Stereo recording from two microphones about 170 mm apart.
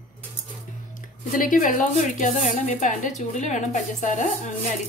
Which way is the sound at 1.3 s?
50° left (ahead or behind).